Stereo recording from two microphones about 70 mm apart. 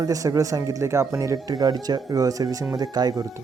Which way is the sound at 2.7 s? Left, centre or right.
Right.